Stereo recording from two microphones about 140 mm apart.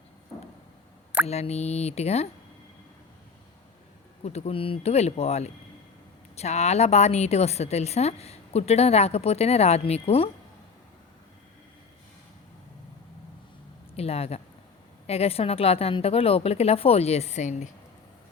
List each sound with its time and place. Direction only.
1.3 s a woman's voice: 50° left (ahead or behind)
4.2 s a woman's voice: 50° left (ahead or behind)
13.9 s a woman's voice: 45° left (ahead or behind)